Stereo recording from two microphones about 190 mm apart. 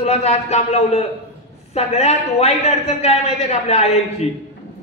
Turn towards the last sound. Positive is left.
turn(degrees=35)  # may be behind; listen again after turning